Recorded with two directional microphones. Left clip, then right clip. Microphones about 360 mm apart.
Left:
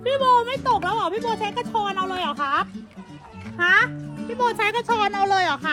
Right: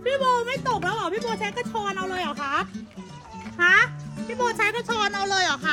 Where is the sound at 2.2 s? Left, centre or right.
Centre.